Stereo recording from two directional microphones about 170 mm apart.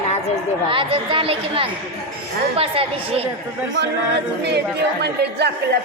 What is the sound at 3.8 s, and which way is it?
Speech, 90° right.